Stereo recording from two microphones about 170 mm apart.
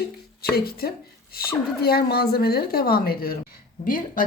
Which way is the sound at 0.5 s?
65° left (ahead or behind).